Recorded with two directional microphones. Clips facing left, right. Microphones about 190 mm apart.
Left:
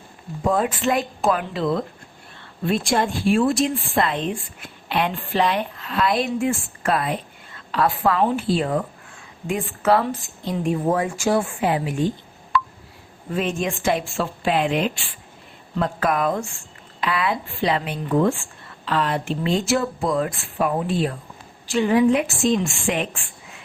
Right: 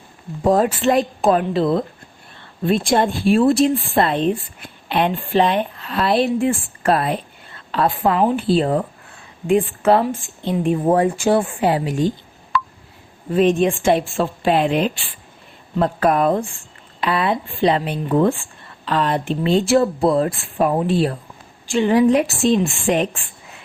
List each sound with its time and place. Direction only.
0.4 s a woman's voice: 35° right (ahead or behind)
2.9 s a woman's voice: 35° right (ahead or behind)
13.3 s speech: 35° right (ahead or behind)
21.8 s speech: 30° right (ahead or behind)